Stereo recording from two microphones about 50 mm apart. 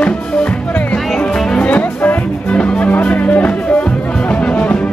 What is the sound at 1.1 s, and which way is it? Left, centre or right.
Music, centre.